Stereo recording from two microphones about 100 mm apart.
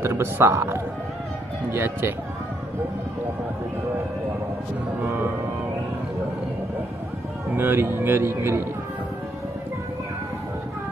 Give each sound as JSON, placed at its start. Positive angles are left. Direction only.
{"t": 0.0, "sound": "a man's voice", "side_deg": -25}
{"t": 5.0, "sound": "a man's voice", "side_deg": -20}
{"t": 7.5, "sound": "a man's voice", "side_deg": -20}